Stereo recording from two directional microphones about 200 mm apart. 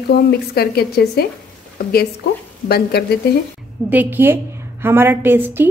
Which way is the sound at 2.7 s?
55° left (ahead or behind).